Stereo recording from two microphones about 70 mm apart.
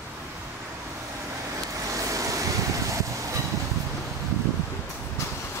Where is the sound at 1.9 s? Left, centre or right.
Right.